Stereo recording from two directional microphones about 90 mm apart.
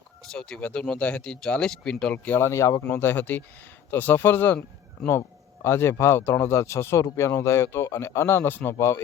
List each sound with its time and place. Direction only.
0.3 s speech: 5° left (ahead or behind)
2.5 s speech: 35° left (ahead or behind)
2.8 s speech: 20° left (ahead or behind)
5.0 s speech: 5° left (ahead or behind)
5.6 s speech: 30° left (ahead or behind)